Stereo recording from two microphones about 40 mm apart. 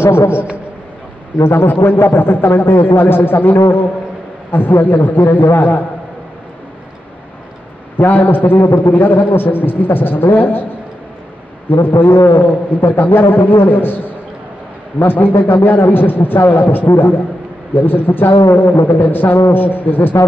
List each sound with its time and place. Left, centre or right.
0.0 s a man's voice: left
1.4 s a man's voice: left
8.0 s a man's voice: left
9.0 s a man's voice: left
11.7 s a man's voice: left